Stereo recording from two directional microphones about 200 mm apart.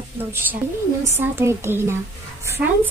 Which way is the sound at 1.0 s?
15° right (ahead or behind).